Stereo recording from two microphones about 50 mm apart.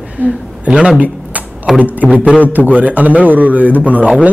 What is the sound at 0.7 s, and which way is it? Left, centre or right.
Speech, centre.